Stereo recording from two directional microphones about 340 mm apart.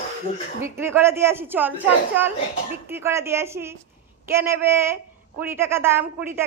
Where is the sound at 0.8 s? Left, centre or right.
Centre.